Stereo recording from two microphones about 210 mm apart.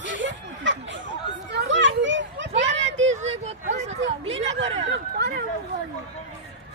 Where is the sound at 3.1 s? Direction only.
30° right (ahead or behind).